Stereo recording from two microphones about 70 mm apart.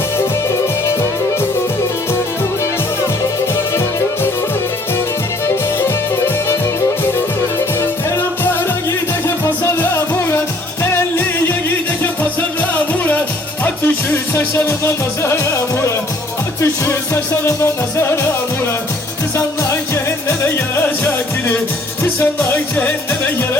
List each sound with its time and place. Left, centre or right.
3.5 s music: left
7.8 s music: left
9.9 s music: left
12.7 s music: left
19.7 s music: left